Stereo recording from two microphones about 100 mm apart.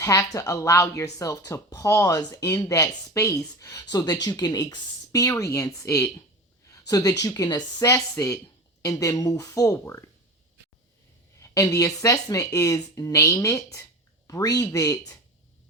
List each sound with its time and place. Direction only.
0.0 s speech: 35° left (ahead or behind)
9.7 s speech: 25° left (ahead or behind)
11.3 s speech: 30° left (ahead or behind)